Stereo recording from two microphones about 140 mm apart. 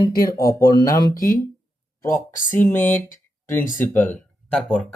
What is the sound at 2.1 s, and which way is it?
Speech, 70° left (ahead or behind).